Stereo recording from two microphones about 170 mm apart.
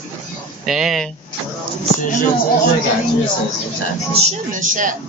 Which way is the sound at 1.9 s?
50° left (ahead or behind).